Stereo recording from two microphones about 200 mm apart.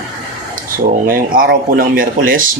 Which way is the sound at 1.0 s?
45° right (ahead or behind).